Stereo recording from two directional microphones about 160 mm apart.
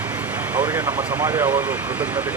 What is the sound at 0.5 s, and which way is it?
Speech, 10° right (ahead or behind).